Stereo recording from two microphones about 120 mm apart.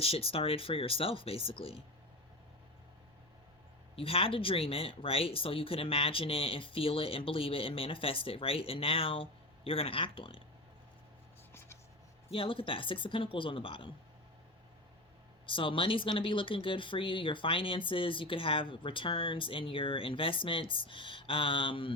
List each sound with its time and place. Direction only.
0.0 s speech: 50° left (ahead or behind)
3.9 s speech: 50° left (ahead or behind)
12.3 s speech: 45° left (ahead or behind)
15.4 s speech: 45° left (ahead or behind)